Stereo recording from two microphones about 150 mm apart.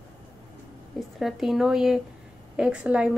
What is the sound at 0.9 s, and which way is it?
A woman's voice, centre (ahead or behind).